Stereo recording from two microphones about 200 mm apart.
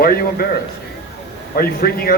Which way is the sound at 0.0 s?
50° left (ahead or behind).